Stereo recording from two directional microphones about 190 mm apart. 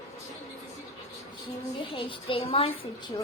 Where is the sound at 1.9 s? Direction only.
25° left (ahead or behind).